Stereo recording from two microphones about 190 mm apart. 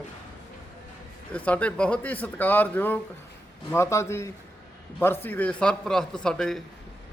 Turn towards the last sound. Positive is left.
turn(degrees=5)  # may be behind; listen again after turning